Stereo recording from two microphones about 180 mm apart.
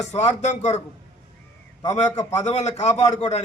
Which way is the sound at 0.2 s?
40° left (ahead or behind).